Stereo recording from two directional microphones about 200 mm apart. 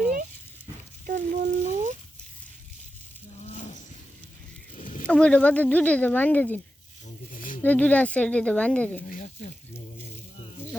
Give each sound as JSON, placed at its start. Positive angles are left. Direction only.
{"t": 1.0, "sound": "frying", "side_deg": -45}
{"t": 3.4, "sound": "a sound", "side_deg": 35}
{"t": 5.0, "sound": "speech", "side_deg": 5}
{"t": 7.3, "sound": "a sound", "side_deg": 45}
{"t": 7.6, "sound": "speech", "side_deg": 10}
{"t": 9.0, "sound": "snake", "side_deg": 45}